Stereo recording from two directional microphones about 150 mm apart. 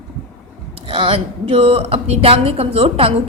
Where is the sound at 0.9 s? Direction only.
35° right (ahead or behind).